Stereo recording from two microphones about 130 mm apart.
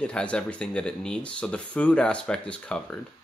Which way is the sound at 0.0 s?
10° left (ahead or behind).